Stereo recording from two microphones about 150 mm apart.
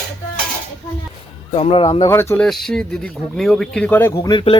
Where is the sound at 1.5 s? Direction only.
40° left (ahead or behind).